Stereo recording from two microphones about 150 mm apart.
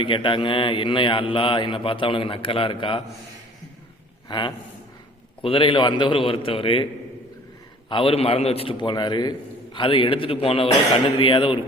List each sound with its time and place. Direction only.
0.0 s a man's voice: 35° left (ahead or behind)
4.3 s a man's voice: 30° left (ahead or behind)
7.9 s a man's voice: 35° left (ahead or behind)